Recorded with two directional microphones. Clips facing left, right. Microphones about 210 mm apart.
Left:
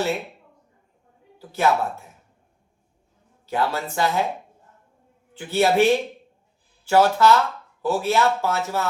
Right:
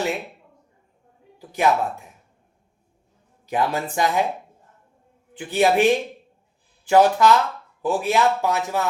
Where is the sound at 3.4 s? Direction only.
15° right (ahead or behind).